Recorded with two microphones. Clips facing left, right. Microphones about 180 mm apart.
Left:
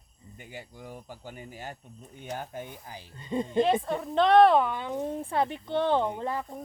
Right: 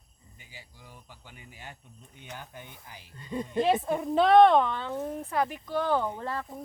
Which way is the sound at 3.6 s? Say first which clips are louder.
Even; 5° right (ahead or behind).